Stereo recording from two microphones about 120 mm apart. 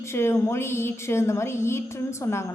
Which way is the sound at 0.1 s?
20° left (ahead or behind).